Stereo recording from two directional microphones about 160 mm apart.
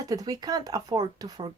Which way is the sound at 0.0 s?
25° right (ahead or behind).